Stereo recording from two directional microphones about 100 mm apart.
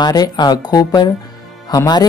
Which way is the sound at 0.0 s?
45° left (ahead or behind).